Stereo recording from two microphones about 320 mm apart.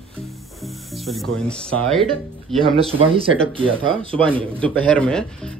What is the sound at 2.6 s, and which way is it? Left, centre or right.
Speech, centre.